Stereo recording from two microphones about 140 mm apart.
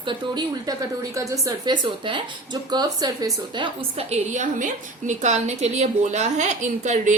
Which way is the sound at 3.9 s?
55° right (ahead or behind).